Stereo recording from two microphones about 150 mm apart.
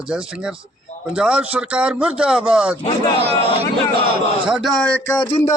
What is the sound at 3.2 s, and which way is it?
Speech, 40° right (ahead or behind).